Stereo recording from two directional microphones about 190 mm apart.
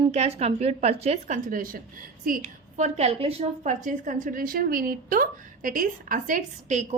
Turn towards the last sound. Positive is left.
turn(degrees=-40)  # may be behind; listen again after turning